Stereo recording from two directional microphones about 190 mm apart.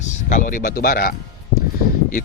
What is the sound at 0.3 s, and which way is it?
Speech, 40° left (ahead or behind).